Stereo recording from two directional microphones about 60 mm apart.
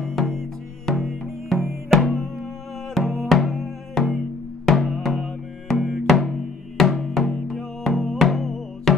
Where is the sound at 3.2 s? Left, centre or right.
Centre.